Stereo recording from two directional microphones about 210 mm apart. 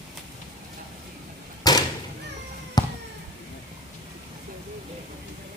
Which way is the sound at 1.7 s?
20° left (ahead or behind).